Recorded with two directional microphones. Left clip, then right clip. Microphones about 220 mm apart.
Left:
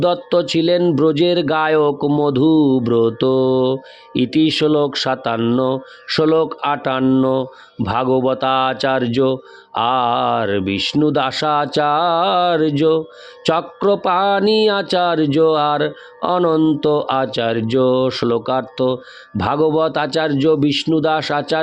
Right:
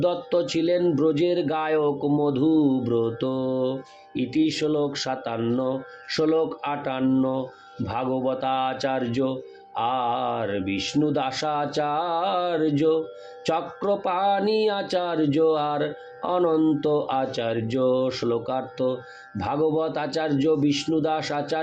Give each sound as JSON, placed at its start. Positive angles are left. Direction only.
{"t": 0.0, "sound": "speech", "side_deg": 50}